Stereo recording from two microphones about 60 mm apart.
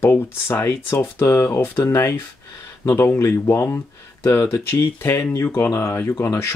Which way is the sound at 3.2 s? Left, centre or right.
Left.